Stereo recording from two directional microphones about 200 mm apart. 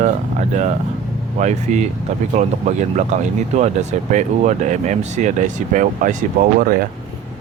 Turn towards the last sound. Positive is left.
turn(degrees=-45)  # may be behind; listen again after turning